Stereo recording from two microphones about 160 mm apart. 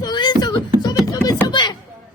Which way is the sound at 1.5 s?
30° left (ahead or behind).